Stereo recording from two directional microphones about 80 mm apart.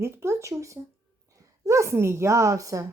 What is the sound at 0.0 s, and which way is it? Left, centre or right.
A woman's voice, right.